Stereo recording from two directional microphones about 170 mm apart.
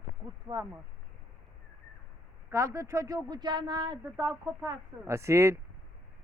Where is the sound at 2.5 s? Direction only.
15° right (ahead or behind).